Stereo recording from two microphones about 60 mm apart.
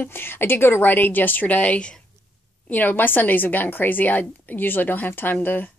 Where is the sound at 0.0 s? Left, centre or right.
Left.